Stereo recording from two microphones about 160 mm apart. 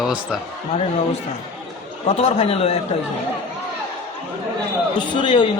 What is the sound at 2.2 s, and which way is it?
Speech, 40° left (ahead or behind).